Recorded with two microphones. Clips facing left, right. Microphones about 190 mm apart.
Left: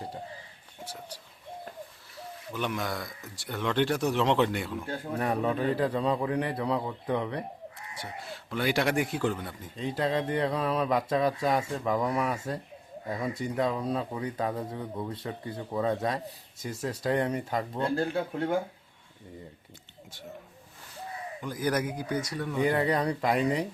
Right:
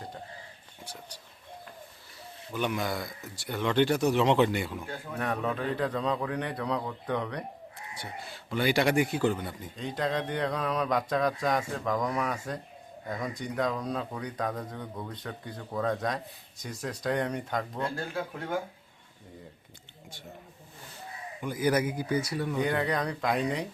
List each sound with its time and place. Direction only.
2.5 s a man's voice: centre (ahead or behind)
4.9 s speech: 30° left (ahead or behind)
5.2 s a man's voice: 10° left (ahead or behind)
17.7 s speech: 30° left (ahead or behind)
21.4 s a man's voice: 5° right (ahead or behind)